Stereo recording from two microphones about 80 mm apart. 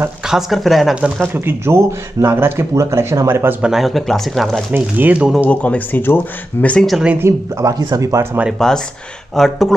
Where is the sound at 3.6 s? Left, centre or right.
Centre.